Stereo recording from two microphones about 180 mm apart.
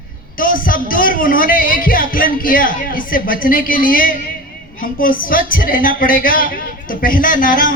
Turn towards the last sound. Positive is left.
turn(degrees=50)  # may be behind; listen again after turning